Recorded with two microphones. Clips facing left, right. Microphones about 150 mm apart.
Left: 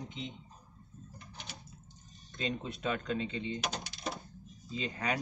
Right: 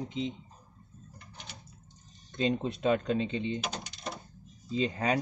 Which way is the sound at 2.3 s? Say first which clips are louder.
Right 8 dB; 20° right (ahead or behind).